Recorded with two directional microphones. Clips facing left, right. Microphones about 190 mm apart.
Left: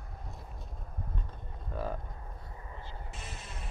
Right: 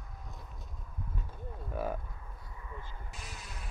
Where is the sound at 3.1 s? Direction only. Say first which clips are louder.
Left 2 dB; centre (ahead or behind).